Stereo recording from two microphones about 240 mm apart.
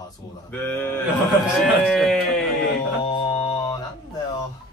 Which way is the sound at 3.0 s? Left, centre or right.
Left.